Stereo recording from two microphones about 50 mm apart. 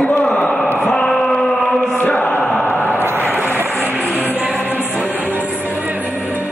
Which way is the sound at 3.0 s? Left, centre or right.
Right.